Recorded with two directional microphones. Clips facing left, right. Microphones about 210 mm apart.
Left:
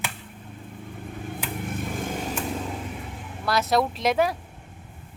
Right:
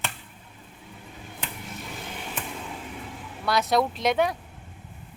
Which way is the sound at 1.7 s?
50° left (ahead or behind).